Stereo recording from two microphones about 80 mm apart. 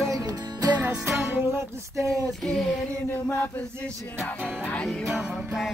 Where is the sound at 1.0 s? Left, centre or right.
Right.